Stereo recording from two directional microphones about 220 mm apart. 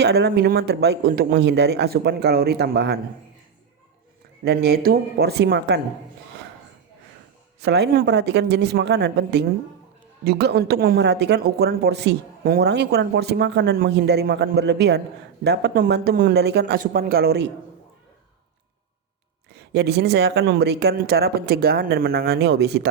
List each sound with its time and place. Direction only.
0.0 s speech: 50° right (ahead or behind)
4.4 s speech: 45° right (ahead or behind)
7.6 s speech: 50° right (ahead or behind)
19.5 s speech: 50° right (ahead or behind)